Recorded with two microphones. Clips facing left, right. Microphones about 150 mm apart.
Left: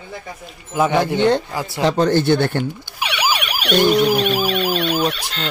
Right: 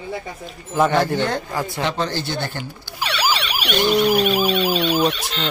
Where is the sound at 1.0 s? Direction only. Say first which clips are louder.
Left 5 dB; 20° left (ahead or behind).